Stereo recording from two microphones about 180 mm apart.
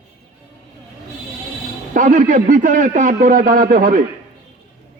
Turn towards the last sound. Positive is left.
turn(degrees=-50)  # may be behind; listen again after turning